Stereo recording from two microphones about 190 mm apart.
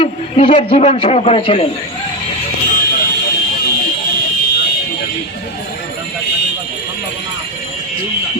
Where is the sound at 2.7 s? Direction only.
55° left (ahead or behind).